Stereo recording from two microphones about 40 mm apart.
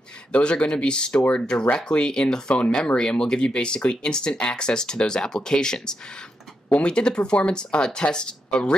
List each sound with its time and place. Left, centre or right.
0.3 s speech: left